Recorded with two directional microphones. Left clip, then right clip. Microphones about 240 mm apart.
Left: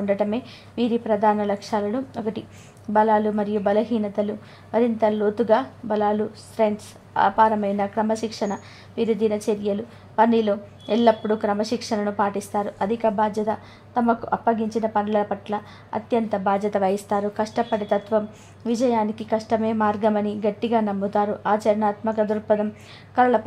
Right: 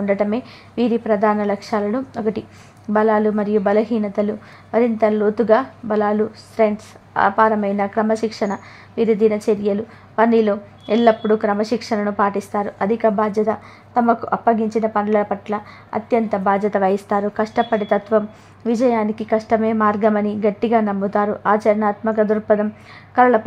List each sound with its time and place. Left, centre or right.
0.0 s a woman's voice: centre